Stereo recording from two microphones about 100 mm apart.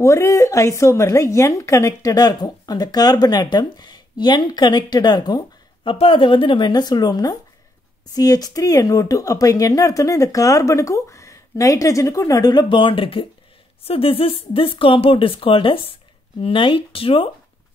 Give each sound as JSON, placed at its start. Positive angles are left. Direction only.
{"t": 0.0, "sound": "speech", "side_deg": 30}
{"t": 5.9, "sound": "speech", "side_deg": 60}
{"t": 13.8, "sound": "speech", "side_deg": 70}